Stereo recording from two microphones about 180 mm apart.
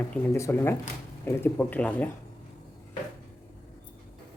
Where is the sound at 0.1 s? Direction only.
15° left (ahead or behind).